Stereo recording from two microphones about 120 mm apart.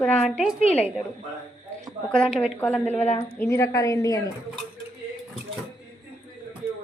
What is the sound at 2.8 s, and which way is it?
Speech, 60° left (ahead or behind).